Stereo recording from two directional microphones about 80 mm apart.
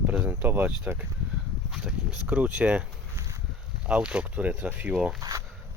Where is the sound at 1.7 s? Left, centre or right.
Centre.